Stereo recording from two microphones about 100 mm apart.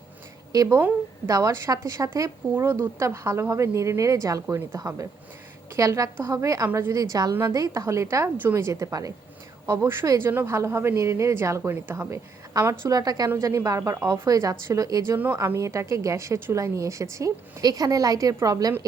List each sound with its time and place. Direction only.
0.5 s a woman's voice: 35° right (ahead or behind)
9.6 s a woman's voice: 25° right (ahead or behind)
12.9 s a woman's voice: 40° right (ahead or behind)